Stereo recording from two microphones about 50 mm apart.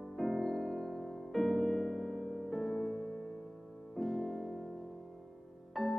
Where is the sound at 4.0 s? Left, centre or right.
Centre.